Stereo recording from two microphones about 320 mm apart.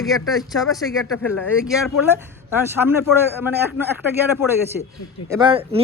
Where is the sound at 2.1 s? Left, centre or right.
Centre.